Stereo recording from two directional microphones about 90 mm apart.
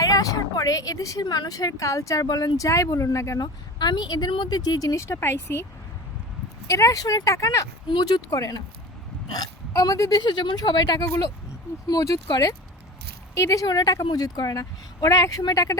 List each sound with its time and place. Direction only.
0.0 s a woman's voice: 40° left (ahead or behind)
3.4 s a woman's voice: 55° left (ahead or behind); by 5.6 s 25° left (ahead or behind)
6.7 s a woman's voice: 35° left (ahead or behind)
7.9 s speech: 55° left (ahead or behind)
8.3 s a woman's voice: 40° left (ahead or behind)